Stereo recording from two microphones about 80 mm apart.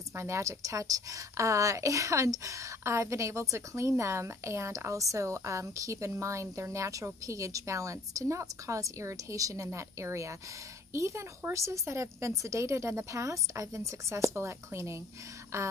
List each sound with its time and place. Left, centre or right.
0.1 s a woman's voice: right